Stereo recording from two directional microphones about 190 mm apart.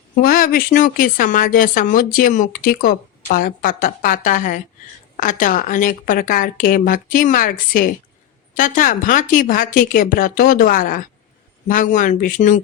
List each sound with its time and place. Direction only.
0.2 s speech: 50° left (ahead or behind)